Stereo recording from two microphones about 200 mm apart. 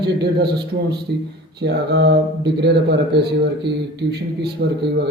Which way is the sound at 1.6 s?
55° right (ahead or behind).